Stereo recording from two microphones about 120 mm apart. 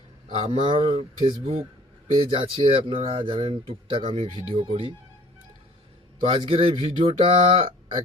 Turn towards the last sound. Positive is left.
turn(degrees=-45)  # may be behind; listen again after turning